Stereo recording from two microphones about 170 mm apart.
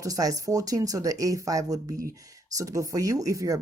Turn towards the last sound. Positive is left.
turn(degrees=-20)  # may be behind; listen again after turning